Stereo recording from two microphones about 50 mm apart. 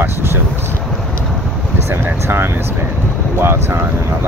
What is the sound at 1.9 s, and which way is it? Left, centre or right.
Speech, right.